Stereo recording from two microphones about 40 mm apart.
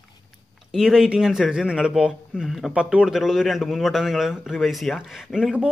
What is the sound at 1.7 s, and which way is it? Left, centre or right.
A man's voice, right.